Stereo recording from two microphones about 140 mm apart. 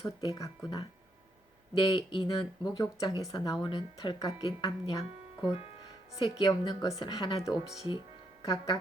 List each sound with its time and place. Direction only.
0.0 s speech: 25° left (ahead or behind)